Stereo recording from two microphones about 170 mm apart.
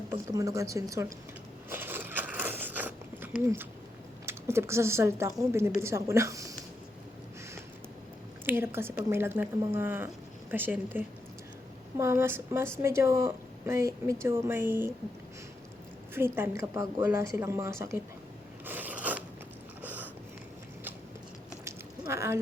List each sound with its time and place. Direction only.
0.3 s speech: 20° right (ahead or behind)
1.7 s biting: 10° right (ahead or behind)
4.3 s a woman's voice: 15° right (ahead or behind)
8.4 s a woman's voice: 15° right (ahead or behind)
16.1 s a woman's voice: 15° right (ahead or behind)
18.6 s a sound: 10° right (ahead or behind)
21.6 s a sound: 15° right (ahead or behind)